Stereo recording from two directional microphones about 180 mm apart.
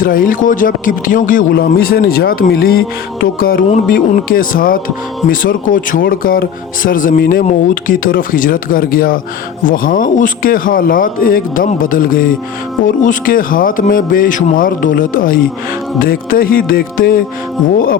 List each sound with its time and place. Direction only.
0.0 s a man's voice: 50° left (ahead or behind)